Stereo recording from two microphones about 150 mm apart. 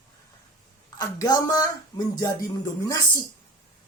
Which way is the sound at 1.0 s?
25° left (ahead or behind).